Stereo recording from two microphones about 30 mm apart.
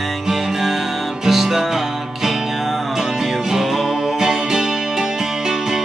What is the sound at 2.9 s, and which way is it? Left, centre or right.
Music, centre.